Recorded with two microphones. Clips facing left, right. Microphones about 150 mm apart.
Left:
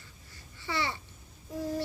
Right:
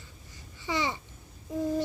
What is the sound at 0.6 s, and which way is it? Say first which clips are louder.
Child singing: right 3 dB; 15° right (ahead or behind).